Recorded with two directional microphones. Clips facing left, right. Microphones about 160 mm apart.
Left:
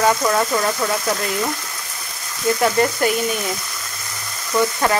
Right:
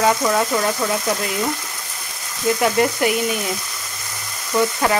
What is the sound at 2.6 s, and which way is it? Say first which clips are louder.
Speech: even; 10° right (ahead or behind).